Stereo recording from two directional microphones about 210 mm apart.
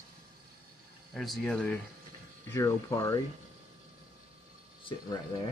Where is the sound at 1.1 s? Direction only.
Centre (ahead or behind).